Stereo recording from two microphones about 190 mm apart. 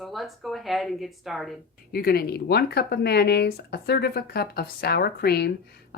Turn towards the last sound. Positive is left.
turn(degrees=55)  # may be behind; listen again after turning